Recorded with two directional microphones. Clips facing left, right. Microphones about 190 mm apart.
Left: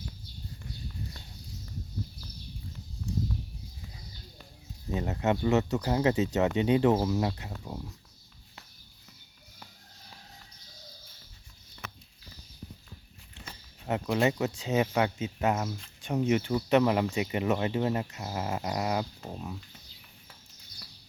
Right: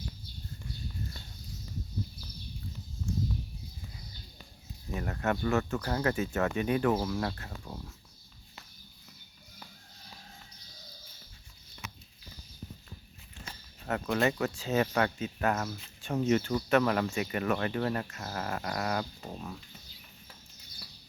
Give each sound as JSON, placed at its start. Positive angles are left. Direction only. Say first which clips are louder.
{"t": 4.9, "sound": "speech", "louder": "left 3 dB", "side_deg": 20}
{"t": 13.8, "sound": "speech", "louder": "left 2 dB", "side_deg": 15}